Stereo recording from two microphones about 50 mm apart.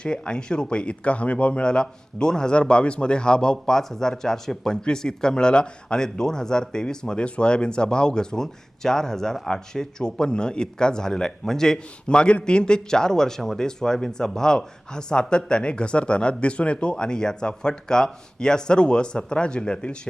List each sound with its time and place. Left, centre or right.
0.0 s speech: centre